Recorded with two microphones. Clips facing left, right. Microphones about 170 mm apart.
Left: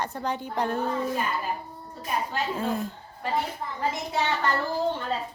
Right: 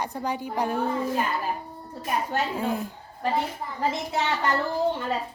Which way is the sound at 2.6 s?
10° right (ahead or behind).